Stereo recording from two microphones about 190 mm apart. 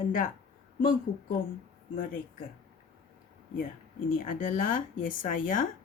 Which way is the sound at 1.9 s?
50° left (ahead or behind).